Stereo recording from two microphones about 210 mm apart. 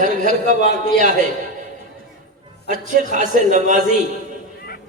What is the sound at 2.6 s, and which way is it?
A man's voice, 35° right (ahead or behind).